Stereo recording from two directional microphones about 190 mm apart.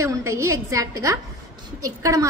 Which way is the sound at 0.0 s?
15° right (ahead or behind).